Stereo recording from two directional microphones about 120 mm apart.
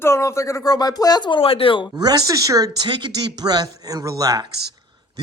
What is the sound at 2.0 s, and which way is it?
A man's voice, 30° right (ahead or behind).